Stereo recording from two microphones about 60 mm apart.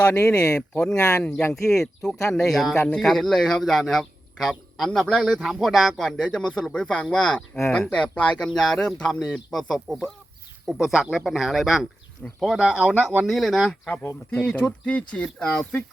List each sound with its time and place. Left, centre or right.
0.2 s speech: centre
0.4 s speech: left
2.3 s speech: centre
6.1 s speech: centre
7.9 s speech: centre
12.5 s speech: centre
13.2 s speech: centre
13.9 s speech: left
14.3 s speech: centre